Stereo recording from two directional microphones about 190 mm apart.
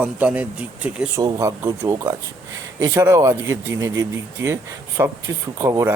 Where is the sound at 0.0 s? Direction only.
10° right (ahead or behind).